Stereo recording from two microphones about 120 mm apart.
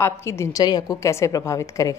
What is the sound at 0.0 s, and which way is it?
A woman's voice, 25° left (ahead or behind).